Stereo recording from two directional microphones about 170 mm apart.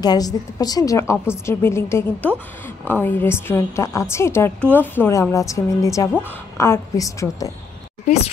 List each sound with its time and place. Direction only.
0.0 s a woman's voice: 20° left (ahead or behind)